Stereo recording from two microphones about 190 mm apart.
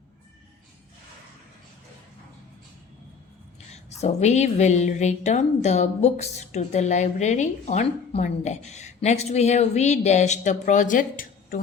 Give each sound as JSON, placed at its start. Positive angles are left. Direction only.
{"t": 3.7, "sound": "a woman's voice", "side_deg": 35}